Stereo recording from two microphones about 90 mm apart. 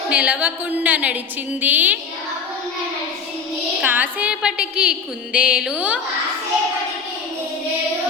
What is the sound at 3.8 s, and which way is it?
A woman's voice, 20° right (ahead or behind).